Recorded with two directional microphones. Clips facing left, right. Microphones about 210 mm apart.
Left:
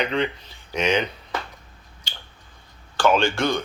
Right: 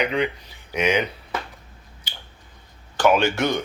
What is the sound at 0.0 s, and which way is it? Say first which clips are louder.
Speech: right 1 dB; 10° right (ahead or behind).